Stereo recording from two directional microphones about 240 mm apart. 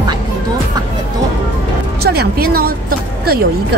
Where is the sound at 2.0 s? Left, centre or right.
Right.